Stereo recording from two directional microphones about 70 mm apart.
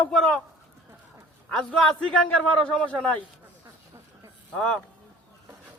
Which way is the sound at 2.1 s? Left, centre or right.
Centre.